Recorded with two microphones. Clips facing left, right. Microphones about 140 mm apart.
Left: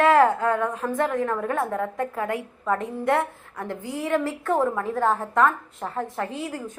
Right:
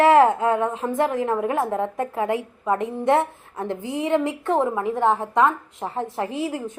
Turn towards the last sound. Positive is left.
turn(degrees=-25)  # may be behind; listen again after turning